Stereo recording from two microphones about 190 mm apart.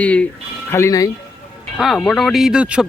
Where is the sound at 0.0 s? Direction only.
5° left (ahead or behind).